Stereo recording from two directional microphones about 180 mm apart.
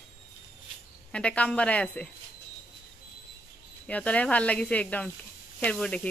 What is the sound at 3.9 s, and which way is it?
Speech, 10° left (ahead or behind).